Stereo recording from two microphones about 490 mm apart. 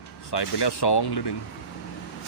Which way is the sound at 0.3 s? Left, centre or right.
Left.